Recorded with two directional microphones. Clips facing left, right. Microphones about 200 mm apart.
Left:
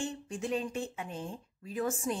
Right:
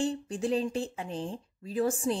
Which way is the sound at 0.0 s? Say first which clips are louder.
Right 6 dB; 35° right (ahead or behind).